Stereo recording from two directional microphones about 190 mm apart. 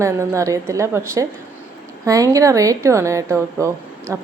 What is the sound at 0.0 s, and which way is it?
A woman's voice, 15° right (ahead or behind).